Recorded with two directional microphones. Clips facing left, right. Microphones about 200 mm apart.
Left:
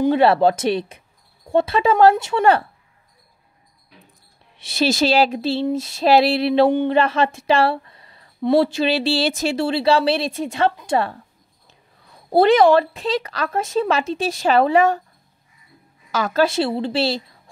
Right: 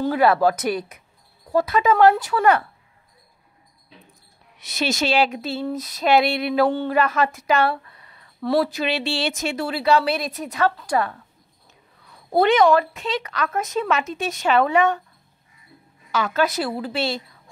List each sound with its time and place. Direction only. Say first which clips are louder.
0.0 s a woman's voice: left 3 dB; 25° left (ahead or behind)
4.6 s a woman's voice: left 5 dB; 30° left (ahead or behind)
16.1 s a woman's voice: left 3 dB; 40° left (ahead or behind)